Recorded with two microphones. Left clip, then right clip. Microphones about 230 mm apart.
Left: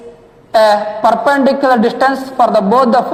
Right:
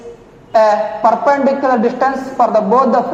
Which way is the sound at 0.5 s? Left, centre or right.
Left.